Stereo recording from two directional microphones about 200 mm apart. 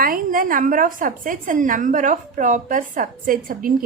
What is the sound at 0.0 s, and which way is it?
A woman's voice, 45° right (ahead or behind).